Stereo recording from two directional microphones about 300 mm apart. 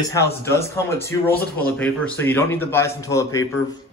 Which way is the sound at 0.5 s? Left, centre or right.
Centre.